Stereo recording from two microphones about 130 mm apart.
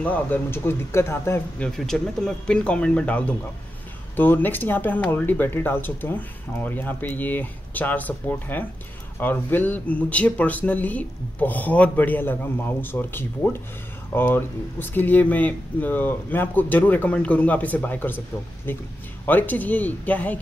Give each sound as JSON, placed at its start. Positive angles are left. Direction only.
{"t": 0.0, "sound": "speech", "side_deg": 15}
{"t": 1.6, "sound": "speech", "side_deg": 5}